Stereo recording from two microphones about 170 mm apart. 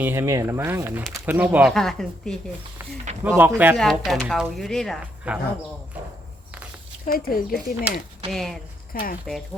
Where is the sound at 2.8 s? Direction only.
10° right (ahead or behind).